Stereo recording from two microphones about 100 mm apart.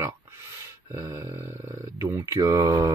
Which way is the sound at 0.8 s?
25° right (ahead or behind).